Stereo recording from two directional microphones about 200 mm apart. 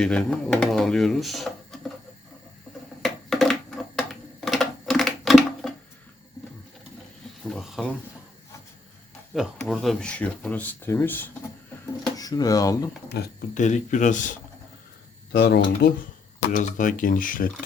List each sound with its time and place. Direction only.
0.0 s speech: 5° left (ahead or behind)
3.0 s a sound: centre (ahead or behind)
7.4 s a sound: centre (ahead or behind)
9.3 s speech: centre (ahead or behind); by 12.9 s 15° left (ahead or behind)
13.1 s speech: 55° left (ahead or behind)
13.5 s speech: 40° left (ahead or behind)
15.3 s speech: 55° left (ahead or behind)
16.5 s speech: 40° left (ahead or behind)